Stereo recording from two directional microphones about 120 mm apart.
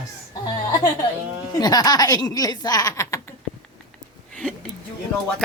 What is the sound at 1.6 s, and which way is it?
Speech, 35° left (ahead or behind).